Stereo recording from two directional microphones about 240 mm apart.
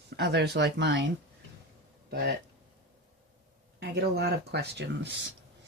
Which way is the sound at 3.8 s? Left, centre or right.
Right.